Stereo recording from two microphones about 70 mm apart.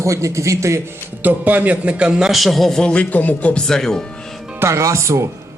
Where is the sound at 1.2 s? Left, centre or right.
Right.